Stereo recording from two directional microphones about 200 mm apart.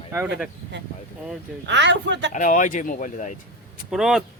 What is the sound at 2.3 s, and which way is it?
Speech, 40° left (ahead or behind).